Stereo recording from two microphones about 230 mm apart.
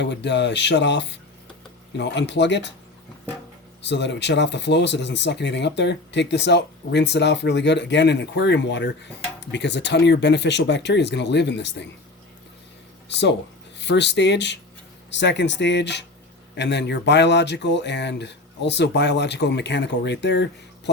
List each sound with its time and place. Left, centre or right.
0.0 s speech: left
3.8 s speech: left
13.7 s speech: left